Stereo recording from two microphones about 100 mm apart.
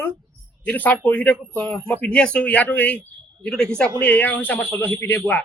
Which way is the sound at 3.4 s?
5° left (ahead or behind).